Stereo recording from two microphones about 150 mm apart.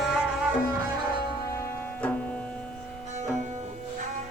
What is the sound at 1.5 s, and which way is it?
Music, 15° left (ahead or behind).